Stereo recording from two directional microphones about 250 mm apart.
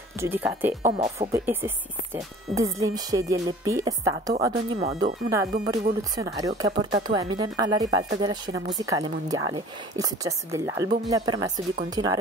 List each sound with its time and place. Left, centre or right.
0.2 s speech: centre
2.8 s speech: centre